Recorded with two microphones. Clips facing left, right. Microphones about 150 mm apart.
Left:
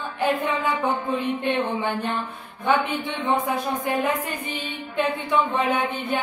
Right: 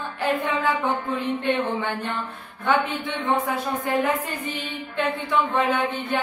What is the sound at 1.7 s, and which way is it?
Music, 15° left (ahead or behind).